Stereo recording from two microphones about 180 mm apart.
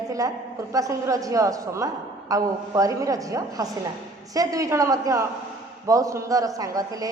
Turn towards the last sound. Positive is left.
turn(degrees=-20)  # may be behind; listen again after turning